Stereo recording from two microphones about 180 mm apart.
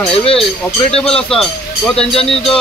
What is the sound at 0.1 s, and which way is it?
Speech, 30° left (ahead or behind).